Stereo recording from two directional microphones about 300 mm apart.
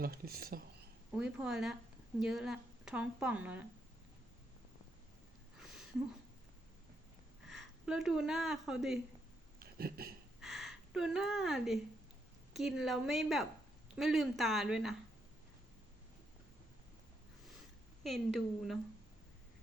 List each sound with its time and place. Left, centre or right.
0.0 s speech: right
1.1 s a woman's voice: centre
5.5 s a sound: centre
7.4 s speech: centre
9.6 s a sound: right
10.4 s a woman's voice: centre
18.0 s a woman's voice: centre